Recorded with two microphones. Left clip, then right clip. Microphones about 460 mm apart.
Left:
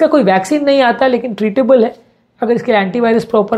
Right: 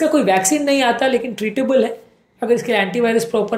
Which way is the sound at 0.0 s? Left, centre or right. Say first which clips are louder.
Left 5 dB; left.